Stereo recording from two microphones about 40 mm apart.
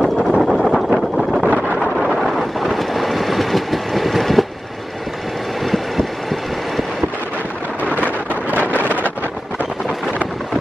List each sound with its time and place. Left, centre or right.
0.0 s vehicle: centre
0.9 s wind noise: centre
2.1 s train: centre
8.7 s wind noise: left